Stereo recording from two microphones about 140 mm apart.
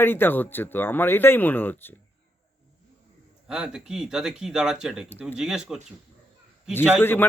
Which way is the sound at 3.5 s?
5° right (ahead or behind).